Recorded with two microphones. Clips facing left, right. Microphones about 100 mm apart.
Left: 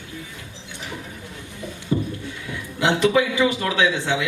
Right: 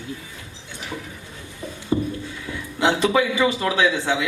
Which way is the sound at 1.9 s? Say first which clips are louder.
Right 1 dB; 30° right (ahead or behind).